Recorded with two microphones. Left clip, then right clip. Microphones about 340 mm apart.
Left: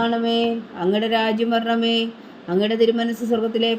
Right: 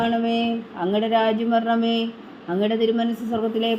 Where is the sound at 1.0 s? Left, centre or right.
Left.